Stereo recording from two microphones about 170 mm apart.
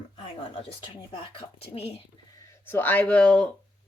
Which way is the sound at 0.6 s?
30° left (ahead or behind).